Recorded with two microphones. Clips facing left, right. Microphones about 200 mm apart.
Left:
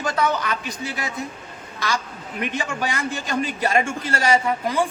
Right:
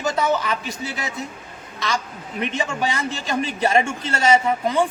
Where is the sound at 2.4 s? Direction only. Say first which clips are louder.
Right 2 dB; 25° right (ahead or behind).